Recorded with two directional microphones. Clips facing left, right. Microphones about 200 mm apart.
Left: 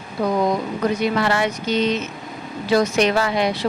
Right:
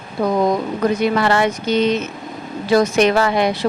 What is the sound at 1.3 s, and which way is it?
A woman's voice, 50° right (ahead or behind).